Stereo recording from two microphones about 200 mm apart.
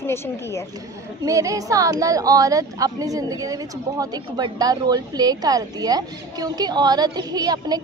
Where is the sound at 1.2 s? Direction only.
15° right (ahead or behind).